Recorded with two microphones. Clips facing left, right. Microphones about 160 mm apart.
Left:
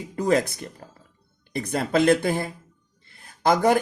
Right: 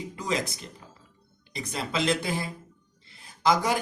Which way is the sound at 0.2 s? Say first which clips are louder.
Left 9 dB; 55° left (ahead or behind).